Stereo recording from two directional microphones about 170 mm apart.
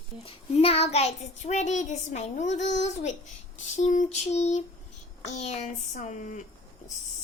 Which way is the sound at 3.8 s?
45° left (ahead or behind).